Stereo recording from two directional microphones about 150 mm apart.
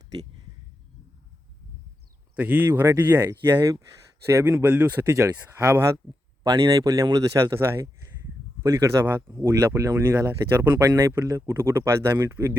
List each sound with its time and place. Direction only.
2.3 s speech: 10° right (ahead or behind)
6.4 s speech: 30° right (ahead or behind)
9.0 s speech: 15° right (ahead or behind)